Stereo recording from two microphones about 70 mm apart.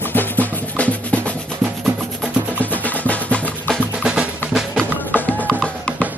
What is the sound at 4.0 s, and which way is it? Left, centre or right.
Drum, centre.